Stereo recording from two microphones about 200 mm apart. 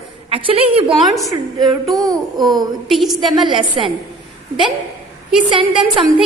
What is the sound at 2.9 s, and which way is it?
Speech, centre (ahead or behind).